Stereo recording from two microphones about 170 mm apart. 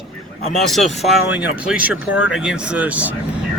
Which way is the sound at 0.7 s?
Centre (ahead or behind).